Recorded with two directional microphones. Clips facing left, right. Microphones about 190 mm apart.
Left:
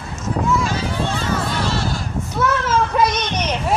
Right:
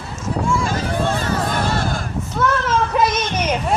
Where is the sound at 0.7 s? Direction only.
50° right (ahead or behind).